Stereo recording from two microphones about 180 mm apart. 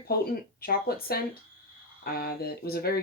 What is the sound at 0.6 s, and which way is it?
Speech, 55° left (ahead or behind).